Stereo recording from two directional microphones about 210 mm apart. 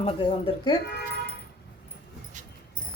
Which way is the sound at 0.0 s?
25° left (ahead or behind).